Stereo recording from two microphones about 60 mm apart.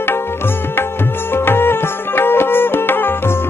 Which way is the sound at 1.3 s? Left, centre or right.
Left.